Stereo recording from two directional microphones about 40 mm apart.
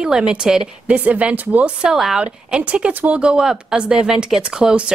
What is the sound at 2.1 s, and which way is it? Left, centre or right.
Speech, right.